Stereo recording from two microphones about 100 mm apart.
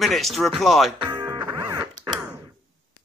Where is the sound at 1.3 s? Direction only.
45° right (ahead or behind).